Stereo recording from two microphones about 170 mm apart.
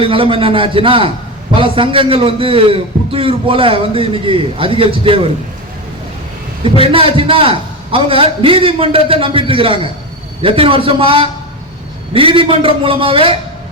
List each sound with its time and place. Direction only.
0.0 s a man's voice: 30° right (ahead or behind)
6.6 s a man's voice: 30° right (ahead or behind)